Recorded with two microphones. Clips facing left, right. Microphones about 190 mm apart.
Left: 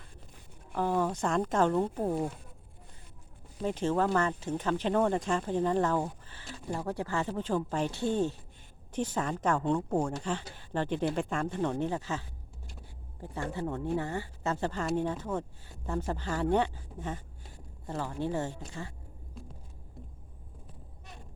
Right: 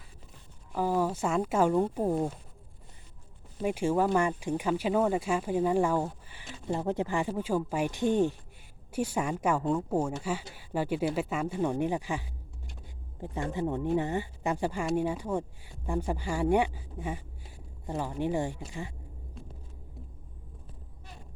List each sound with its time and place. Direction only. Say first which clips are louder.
0.7 s speech: right 1 dB; 5° right (ahead or behind)
3.6 s speech: right 2 dB; 10° right (ahead or behind)
13.3 s speech: right 3 dB; 15° right (ahead or behind)